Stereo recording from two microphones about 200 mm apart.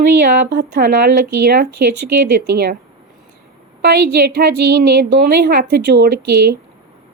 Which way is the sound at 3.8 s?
55° right (ahead or behind).